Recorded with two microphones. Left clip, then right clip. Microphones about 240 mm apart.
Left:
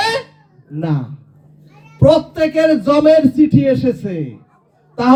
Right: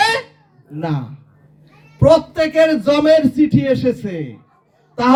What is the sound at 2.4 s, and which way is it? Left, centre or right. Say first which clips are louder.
Speech: even; right.